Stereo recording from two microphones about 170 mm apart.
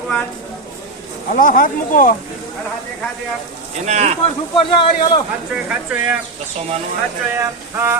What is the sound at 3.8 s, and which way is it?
Speech, 40° right (ahead or behind).